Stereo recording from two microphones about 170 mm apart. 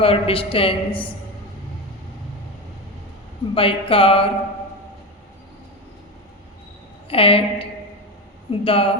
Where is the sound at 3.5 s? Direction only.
30° left (ahead or behind).